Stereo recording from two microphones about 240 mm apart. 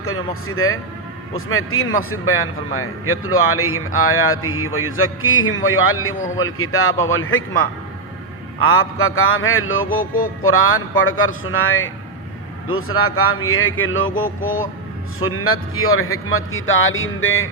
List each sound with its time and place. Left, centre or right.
0.0 s a man's voice: left
8.6 s a man's voice: left
14.3 s speech: left
15.2 s a man's voice: left